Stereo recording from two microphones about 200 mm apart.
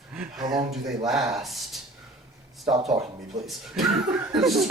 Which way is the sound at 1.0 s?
Centre (ahead or behind).